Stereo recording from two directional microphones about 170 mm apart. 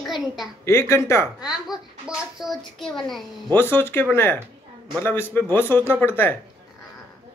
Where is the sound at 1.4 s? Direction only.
5° right (ahead or behind).